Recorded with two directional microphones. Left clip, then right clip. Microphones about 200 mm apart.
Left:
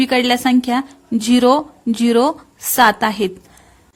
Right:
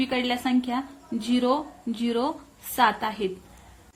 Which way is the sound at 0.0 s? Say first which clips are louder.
Left 11 dB; 50° left (ahead or behind).